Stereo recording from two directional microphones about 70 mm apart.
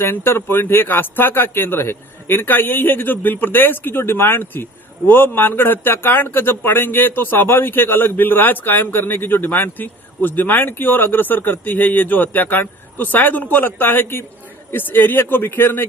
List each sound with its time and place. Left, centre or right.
0.0 s speech: left